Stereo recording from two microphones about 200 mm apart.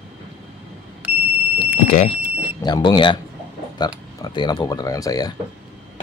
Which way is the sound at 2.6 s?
20° left (ahead or behind).